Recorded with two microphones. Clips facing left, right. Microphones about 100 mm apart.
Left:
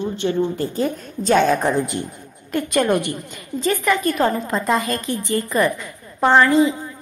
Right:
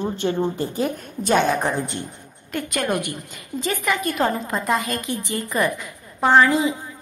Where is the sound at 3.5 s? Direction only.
15° right (ahead or behind).